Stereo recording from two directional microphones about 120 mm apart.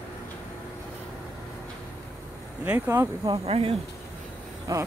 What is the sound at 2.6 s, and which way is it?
Speech, 15° right (ahead or behind).